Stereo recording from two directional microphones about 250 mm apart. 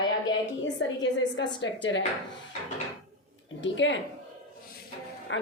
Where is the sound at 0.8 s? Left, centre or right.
Left.